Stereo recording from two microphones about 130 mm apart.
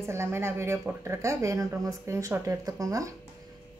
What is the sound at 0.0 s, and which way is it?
Speech, 20° right (ahead or behind).